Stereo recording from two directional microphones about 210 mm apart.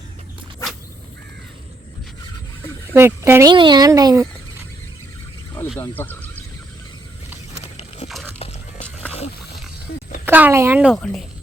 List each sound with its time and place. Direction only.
2.9 s speech: 10° right (ahead or behind)
3.5 s speech: 20° right (ahead or behind)
5.7 s speech: 10° left (ahead or behind)
7.6 s pig: 30° left (ahead or behind)
8.0 s a sound: centre (ahead or behind)
10.2 s speech: 10° right (ahead or behind)
10.9 s speech: 5° left (ahead or behind)